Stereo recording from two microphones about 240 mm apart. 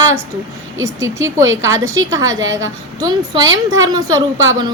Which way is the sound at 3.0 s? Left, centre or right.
Centre.